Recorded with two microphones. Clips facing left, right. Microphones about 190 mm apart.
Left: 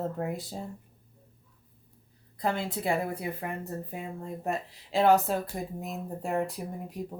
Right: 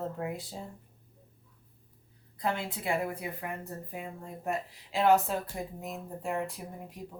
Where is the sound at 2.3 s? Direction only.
35° left (ahead or behind).